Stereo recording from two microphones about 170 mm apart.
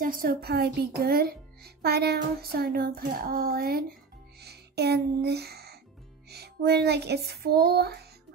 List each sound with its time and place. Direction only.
0.0 s a child's voice: 55° right (ahead or behind)
4.4 s music: 70° right (ahead or behind)
6.3 s speech: 70° right (ahead or behind)